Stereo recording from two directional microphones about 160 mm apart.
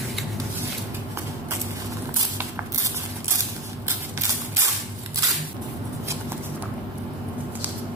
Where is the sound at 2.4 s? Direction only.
15° right (ahead or behind).